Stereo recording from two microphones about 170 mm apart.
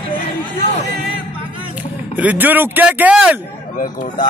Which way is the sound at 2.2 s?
10° right (ahead or behind).